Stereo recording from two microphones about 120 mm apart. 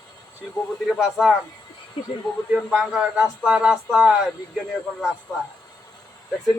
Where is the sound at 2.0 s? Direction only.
45° left (ahead or behind).